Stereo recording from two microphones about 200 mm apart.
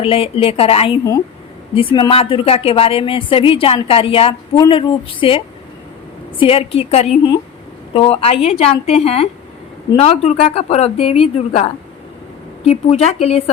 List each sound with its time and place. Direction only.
0.0 s a woman's voice: 30° left (ahead or behind)
6.4 s a woman's voice: 30° left (ahead or behind)